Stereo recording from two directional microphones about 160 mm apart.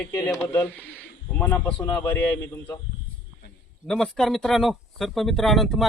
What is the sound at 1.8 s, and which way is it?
Speech, 20° left (ahead or behind).